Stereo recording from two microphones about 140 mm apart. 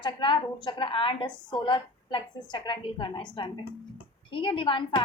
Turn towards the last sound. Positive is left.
turn(degrees=35)  # may be behind; listen again after turning